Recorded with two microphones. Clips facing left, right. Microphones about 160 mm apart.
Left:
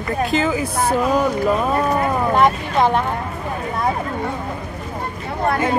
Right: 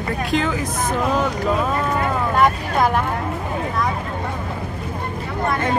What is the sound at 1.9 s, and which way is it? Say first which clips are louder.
Vehicle: left 3 dB; 25° left (ahead or behind).